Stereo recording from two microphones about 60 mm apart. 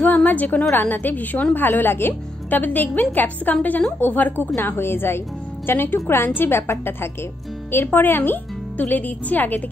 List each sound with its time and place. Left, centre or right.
0.0 s a woman's voice: left